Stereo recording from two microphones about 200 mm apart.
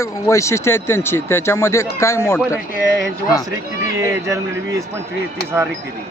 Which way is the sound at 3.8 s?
15° right (ahead or behind).